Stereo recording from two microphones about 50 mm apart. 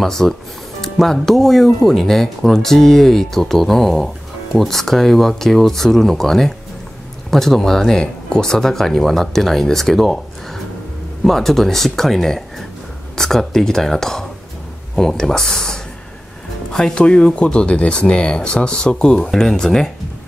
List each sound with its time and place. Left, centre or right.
0.0 s speech: centre
17.0 s speech: left